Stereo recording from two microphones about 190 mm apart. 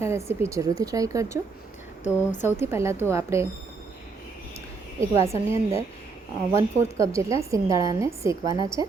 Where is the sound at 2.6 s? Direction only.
15° right (ahead or behind).